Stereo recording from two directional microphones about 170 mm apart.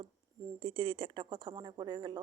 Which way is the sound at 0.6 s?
30° right (ahead or behind).